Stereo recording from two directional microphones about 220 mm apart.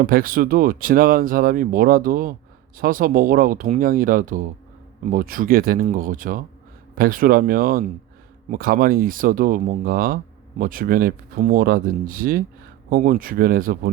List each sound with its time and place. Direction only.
0.0 s speech: 40° right (ahead or behind)